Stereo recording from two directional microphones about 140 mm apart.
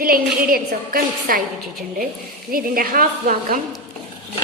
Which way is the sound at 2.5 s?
90° right.